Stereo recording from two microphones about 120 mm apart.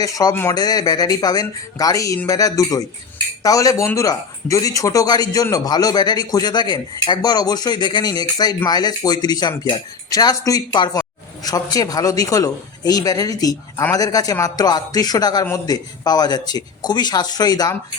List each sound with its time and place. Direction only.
0.0 s speech: 30° left (ahead or behind)